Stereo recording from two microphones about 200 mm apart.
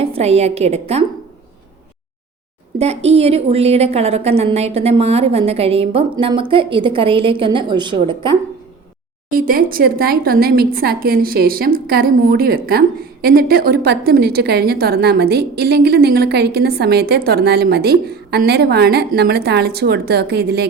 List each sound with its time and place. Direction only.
0.0 s a woman's voice: 30° right (ahead or behind)
2.7 s a woman's voice: 30° right (ahead or behind)
9.3 s a woman's voice: 45° right (ahead or behind)